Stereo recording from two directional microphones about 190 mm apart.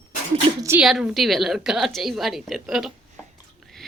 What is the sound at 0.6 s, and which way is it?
A woman's voice, 5° right (ahead or behind).